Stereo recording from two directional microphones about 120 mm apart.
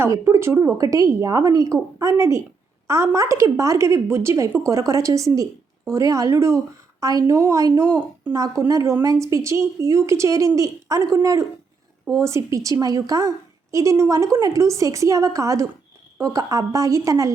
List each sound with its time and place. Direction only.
0.0 s a woman's voice: 20° right (ahead or behind)
8.4 s a woman's voice: 30° right (ahead or behind)